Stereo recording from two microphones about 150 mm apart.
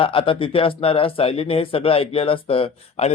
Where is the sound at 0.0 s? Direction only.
35° left (ahead or behind).